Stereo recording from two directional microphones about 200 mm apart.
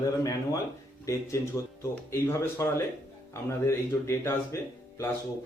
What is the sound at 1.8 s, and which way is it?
Speech, 15° left (ahead or behind).